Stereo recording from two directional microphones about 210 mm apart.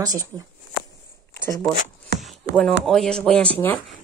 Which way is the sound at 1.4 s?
15° left (ahead or behind).